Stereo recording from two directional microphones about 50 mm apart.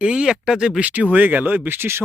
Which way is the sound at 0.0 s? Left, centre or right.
Centre.